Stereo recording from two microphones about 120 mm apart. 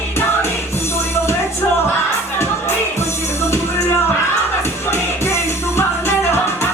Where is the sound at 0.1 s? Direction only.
20° left (ahead or behind).